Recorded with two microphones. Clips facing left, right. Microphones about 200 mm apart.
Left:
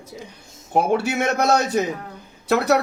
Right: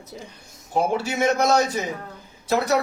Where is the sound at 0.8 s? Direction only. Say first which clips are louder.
Left 2 dB; 60° left (ahead or behind).